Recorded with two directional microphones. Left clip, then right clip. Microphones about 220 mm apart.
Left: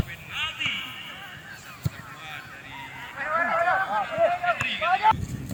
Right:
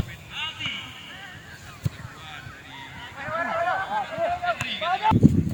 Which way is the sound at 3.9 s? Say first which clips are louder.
Left 3 dB; 30° left (ahead or behind).